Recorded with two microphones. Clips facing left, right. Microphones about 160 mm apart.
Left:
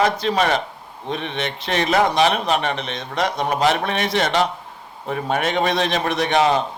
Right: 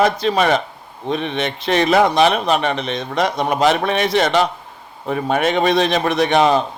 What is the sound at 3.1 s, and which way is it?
Speech, 55° right (ahead or behind).